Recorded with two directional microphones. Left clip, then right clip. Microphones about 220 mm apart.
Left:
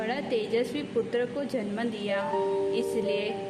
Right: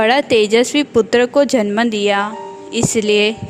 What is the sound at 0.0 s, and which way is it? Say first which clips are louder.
A woman's voice: right 17 dB; 50° right (ahead or behind).